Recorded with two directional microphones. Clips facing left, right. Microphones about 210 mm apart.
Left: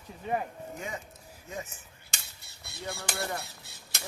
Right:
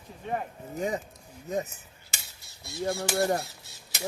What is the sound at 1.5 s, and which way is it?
Speech, 35° right (ahead or behind).